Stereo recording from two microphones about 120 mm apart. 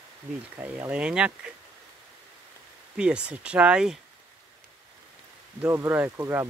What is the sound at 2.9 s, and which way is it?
Speech, 10° right (ahead or behind).